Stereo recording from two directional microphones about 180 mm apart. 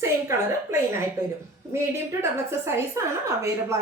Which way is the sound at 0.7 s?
15° right (ahead or behind).